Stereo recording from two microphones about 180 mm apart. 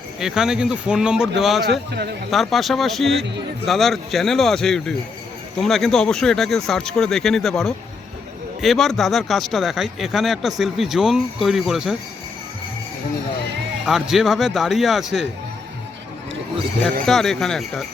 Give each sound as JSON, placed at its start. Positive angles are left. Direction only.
{"t": 0.2, "sound": "speech", "side_deg": -5}
{"t": 1.6, "sound": "a man's voice", "side_deg": -65}
{"t": 2.3, "sound": "speech", "side_deg": 0}
{"t": 3.2, "sound": "a man's voice", "side_deg": -75}
{"t": 3.7, "sound": "speech", "side_deg": 0}
{"t": 13.8, "sound": "speech", "side_deg": -5}
{"t": 17.1, "sound": "speech", "side_deg": 0}